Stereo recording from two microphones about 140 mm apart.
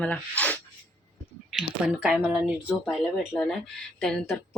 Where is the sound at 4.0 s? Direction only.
5° left (ahead or behind).